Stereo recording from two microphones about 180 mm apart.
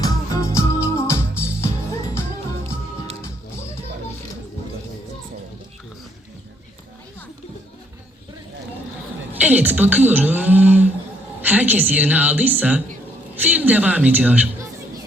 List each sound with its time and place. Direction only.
0.0 s music: 20° left (ahead or behind)
9.3 s a woman's voice: 10° right (ahead or behind)